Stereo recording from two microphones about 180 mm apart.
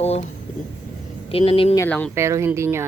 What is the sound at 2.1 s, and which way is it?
Speech, 15° right (ahead or behind).